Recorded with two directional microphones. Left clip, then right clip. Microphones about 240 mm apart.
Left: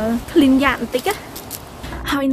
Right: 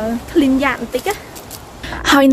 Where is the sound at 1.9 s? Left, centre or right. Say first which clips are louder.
Right 9 dB; right.